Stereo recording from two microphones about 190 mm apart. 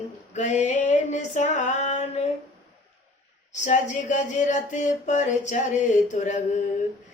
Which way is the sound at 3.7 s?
40° left (ahead or behind).